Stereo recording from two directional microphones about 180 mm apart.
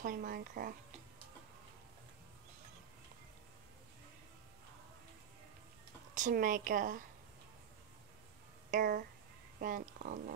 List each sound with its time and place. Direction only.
0.0 s speech: 50° right (ahead or behind)
6.1 s speech: 45° right (ahead or behind)
8.6 s speech: 50° right (ahead or behind)